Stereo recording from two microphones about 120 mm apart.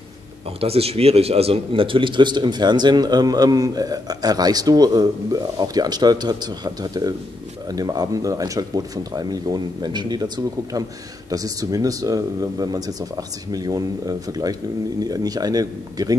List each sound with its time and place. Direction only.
0.6 s speech: 55° right (ahead or behind); by 16.2 s 30° right (ahead or behind)